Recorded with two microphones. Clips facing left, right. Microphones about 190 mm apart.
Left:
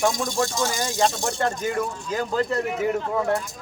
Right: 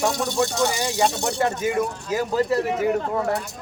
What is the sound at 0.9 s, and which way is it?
Speech, 15° right (ahead or behind).